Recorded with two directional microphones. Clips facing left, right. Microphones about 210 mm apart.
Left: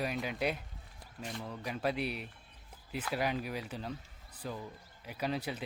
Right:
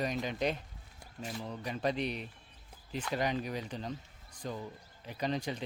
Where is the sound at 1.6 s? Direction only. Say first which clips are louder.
Right 1 dB; 5° left (ahead or behind).